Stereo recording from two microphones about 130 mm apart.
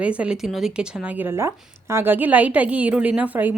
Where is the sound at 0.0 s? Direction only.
10° right (ahead or behind).